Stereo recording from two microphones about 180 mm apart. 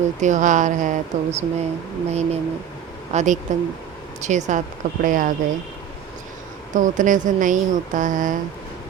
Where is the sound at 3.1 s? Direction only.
40° right (ahead or behind).